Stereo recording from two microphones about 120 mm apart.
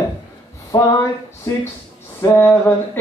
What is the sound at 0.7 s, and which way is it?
Speech, 35° left (ahead or behind).